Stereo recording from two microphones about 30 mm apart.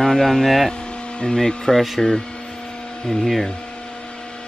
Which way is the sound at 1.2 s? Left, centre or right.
Centre.